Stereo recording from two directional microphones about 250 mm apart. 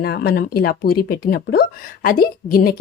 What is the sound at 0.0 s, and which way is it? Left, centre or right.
A woman's voice, left.